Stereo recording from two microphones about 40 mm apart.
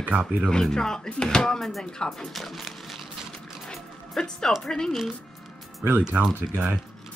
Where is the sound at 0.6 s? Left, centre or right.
Centre.